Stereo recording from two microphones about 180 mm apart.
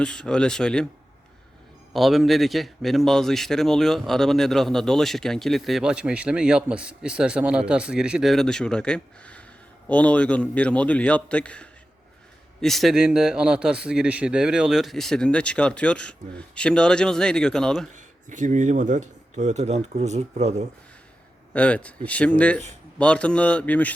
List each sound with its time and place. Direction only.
0.0 s a man's voice: 5° left (ahead or behind)
1.9 s a man's voice: centre (ahead or behind)
17.9 s speech: 45° right (ahead or behind)
21.5 s a man's voice: 5° left (ahead or behind)